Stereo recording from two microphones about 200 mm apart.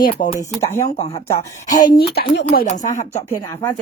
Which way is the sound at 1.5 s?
40° left (ahead or behind).